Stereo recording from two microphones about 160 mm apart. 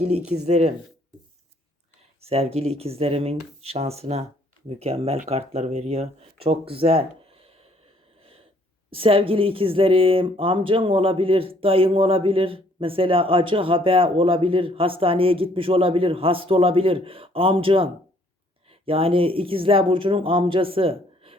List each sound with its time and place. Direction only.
0.4 s speech: 45° right (ahead or behind)
2.2 s speech: 40° right (ahead or behind)
8.2 s a sound: 35° right (ahead or behind)
8.9 s speech: 35° right (ahead or behind)